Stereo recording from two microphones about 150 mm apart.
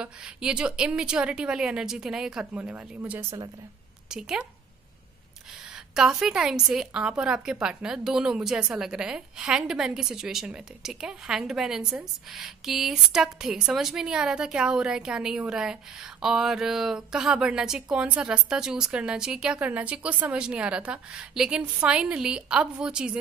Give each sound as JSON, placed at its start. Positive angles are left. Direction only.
{"t": 0.0, "sound": "a woman's voice", "side_deg": -5}
{"t": 5.9, "sound": "a woman's voice", "side_deg": -5}